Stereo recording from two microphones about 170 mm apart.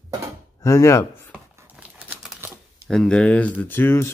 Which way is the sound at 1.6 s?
10° right (ahead or behind).